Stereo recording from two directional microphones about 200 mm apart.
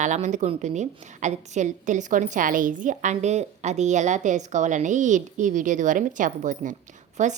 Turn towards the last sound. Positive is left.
turn(degrees=-35)  # may be behind; listen again after turning